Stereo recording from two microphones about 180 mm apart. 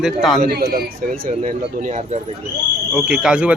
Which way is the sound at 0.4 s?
60° right (ahead or behind).